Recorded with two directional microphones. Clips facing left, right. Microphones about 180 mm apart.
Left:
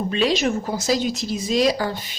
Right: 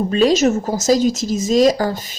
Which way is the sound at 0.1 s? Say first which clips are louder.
Right 7 dB; 40° right (ahead or behind).